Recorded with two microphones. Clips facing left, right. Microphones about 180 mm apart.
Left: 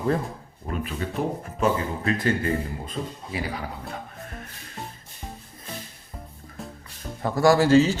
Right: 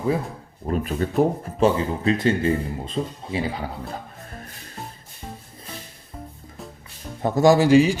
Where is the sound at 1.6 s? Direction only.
25° right (ahead or behind).